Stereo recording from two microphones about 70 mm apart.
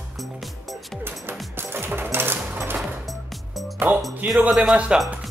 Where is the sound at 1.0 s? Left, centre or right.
Right.